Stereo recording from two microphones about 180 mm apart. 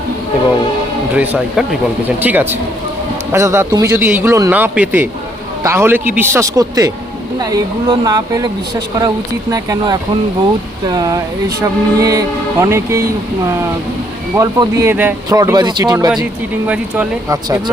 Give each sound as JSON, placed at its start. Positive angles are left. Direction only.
{"t": 1.1, "sound": "speech", "side_deg": -10}
{"t": 16.6, "sound": "speech", "side_deg": -10}